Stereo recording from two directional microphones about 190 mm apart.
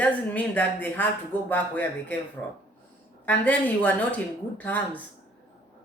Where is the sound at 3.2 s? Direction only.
10° left (ahead or behind).